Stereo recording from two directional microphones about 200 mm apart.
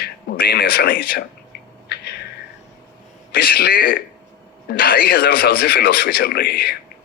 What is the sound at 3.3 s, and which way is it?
Speech, 50° left (ahead or behind).